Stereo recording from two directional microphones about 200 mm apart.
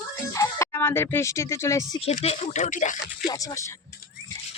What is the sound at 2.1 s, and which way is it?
Speech, 35° left (ahead or behind).